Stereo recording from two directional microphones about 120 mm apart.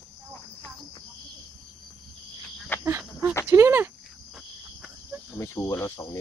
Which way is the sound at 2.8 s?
20° right (ahead or behind).